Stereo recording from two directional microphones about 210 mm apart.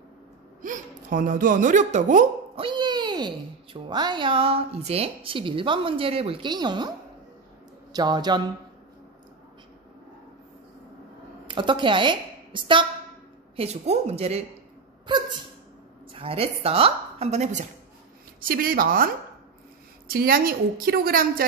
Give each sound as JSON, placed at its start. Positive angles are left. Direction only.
{"t": 0.6, "sound": "speech", "side_deg": -40}
{"t": 2.6, "sound": "a child's voice", "side_deg": -20}
{"t": 7.9, "sound": "a child's voice", "side_deg": -20}
{"t": 11.4, "sound": "a woman's voice", "side_deg": -25}
{"t": 18.4, "sound": "a woman's voice", "side_deg": -45}
{"t": 20.1, "sound": "a woman's voice", "side_deg": -45}